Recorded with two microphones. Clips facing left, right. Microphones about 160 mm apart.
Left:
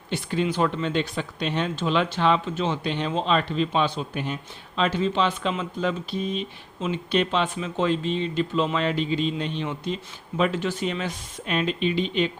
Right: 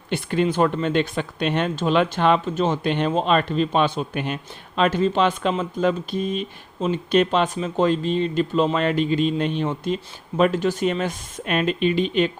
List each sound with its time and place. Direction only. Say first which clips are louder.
0.1 s speech: right 4 dB; 60° right (ahead or behind)
1.7 s speech: right 4 dB; 50° right (ahead or behind); by 4.4 s 65° right (ahead or behind)
4.8 s speech: right 4 dB; 50° right (ahead or behind)